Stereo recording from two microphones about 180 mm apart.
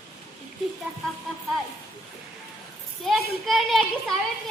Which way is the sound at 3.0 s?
Centre (ahead or behind).